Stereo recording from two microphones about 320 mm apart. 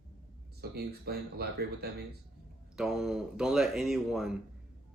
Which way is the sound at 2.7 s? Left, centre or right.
Centre.